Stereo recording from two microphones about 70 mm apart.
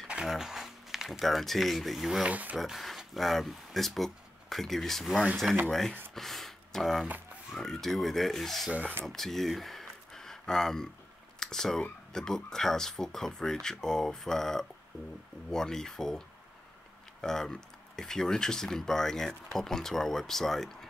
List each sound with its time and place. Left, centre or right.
0.1 s speech: centre
2.2 s speech: right
2.5 s speech: centre
8.7 s speech: right
9.0 s speech: centre